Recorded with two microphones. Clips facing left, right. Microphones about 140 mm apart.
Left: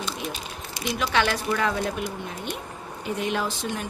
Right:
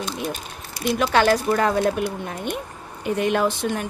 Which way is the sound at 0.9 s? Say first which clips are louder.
Right 6 dB; 50° right (ahead or behind).